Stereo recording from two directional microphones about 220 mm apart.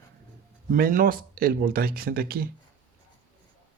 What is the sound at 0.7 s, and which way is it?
Speech, 40° right (ahead or behind).